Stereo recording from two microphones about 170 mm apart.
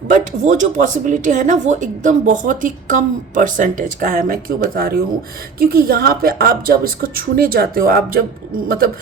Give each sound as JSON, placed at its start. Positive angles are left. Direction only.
{"t": 0.1, "sound": "a woman's voice", "side_deg": -45}